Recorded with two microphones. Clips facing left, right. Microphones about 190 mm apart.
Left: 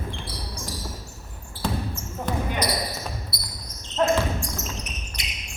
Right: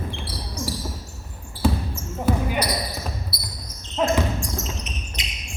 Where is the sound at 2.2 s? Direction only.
10° right (ahead or behind).